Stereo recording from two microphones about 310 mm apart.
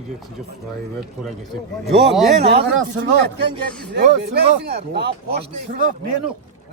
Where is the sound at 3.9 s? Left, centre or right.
Right.